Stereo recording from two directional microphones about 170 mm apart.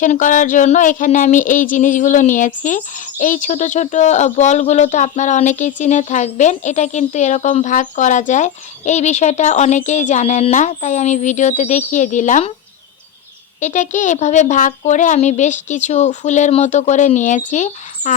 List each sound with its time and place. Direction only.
0.0 s speech: 50° left (ahead or behind)
13.6 s speech: 45° left (ahead or behind)